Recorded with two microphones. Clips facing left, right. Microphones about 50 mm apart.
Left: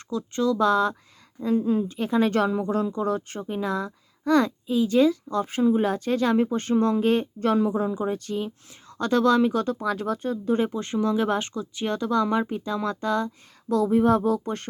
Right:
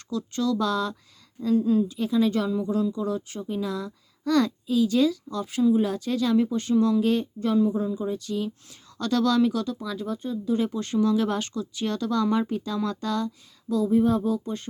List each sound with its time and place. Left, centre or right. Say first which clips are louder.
0.1 s speech: left 2 dB; left
7.3 s speech: left 1 dB; left
7.7 s speech: left 2 dB; left
8.0 s speech: left 1 dB; left
9.7 s speech: left 5 dB; left
10.6 s speech: even; left
13.7 s speech: left 2 dB; left